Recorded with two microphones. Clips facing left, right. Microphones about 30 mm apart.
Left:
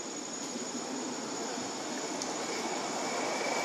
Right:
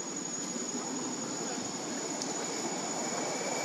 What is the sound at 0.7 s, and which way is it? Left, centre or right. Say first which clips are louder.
Vehicle: even; left.